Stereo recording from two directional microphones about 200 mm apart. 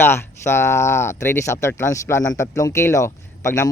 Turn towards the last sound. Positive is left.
turn(degrees=15)  # may be behind; listen again after turning